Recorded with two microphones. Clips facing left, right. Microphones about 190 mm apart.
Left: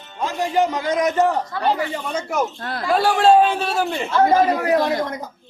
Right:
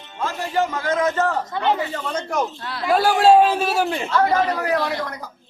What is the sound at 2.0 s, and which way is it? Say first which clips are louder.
A man's voice: even; 10° left (ahead or behind).